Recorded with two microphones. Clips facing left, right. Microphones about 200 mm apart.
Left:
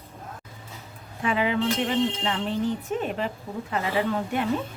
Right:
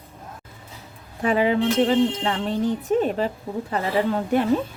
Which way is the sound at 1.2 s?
40° right (ahead or behind).